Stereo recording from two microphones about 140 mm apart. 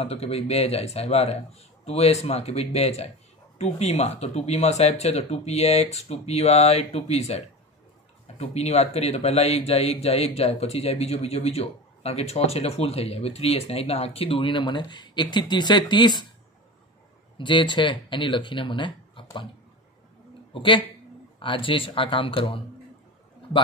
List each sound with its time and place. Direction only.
0.0 s speech: 45° left (ahead or behind)
17.4 s speech: 35° left (ahead or behind)
20.5 s speech: 35° left (ahead or behind)